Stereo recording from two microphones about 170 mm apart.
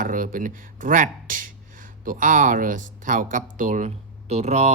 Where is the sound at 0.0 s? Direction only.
55° right (ahead or behind).